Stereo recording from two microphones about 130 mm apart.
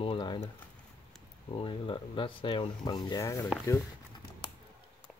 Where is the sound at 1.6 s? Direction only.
40° left (ahead or behind); by 3.4 s 25° left (ahead or behind).